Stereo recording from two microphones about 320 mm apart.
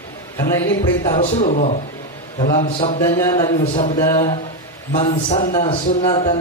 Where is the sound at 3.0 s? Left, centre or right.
Centre.